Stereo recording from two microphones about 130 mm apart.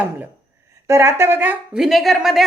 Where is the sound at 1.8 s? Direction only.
Centre (ahead or behind).